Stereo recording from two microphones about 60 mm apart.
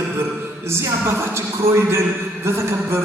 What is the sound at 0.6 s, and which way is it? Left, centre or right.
A man's voice, right.